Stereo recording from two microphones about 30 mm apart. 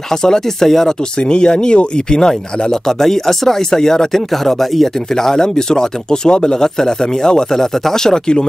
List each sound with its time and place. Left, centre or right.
0.1 s speech: centre
1.2 s speech: left
4.3 s speech: centre; by 8.5 s left